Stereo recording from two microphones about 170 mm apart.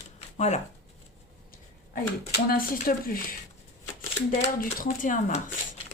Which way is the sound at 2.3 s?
60° left (ahead or behind).